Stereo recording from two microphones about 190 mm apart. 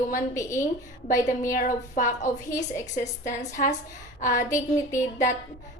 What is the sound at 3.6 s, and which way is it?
Speech, 45° left (ahead or behind).